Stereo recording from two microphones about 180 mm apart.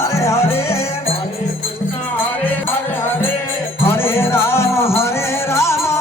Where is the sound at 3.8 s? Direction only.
15° left (ahead or behind).